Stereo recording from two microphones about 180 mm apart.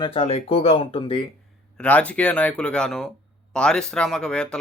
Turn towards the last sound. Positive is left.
turn(degrees=5)  # may be behind; listen again after turning